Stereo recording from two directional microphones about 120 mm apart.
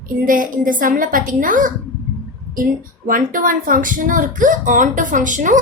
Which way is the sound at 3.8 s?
90° right.